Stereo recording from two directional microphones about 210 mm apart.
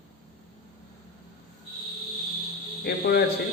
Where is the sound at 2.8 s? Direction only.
50° left (ahead or behind).